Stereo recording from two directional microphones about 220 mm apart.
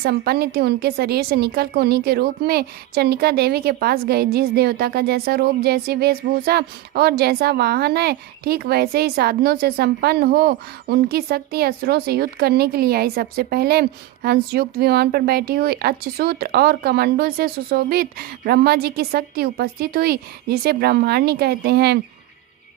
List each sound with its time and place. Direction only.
0.0 s a woman's voice: 45° right (ahead or behind)